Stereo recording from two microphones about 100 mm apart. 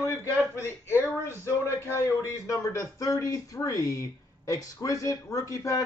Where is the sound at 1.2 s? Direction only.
25° left (ahead or behind).